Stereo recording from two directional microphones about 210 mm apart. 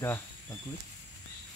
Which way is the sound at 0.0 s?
10° left (ahead or behind).